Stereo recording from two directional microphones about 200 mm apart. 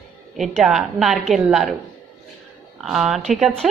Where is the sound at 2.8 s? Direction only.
Centre (ahead or behind).